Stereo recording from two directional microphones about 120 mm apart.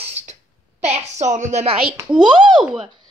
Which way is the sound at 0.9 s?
75° right (ahead or behind).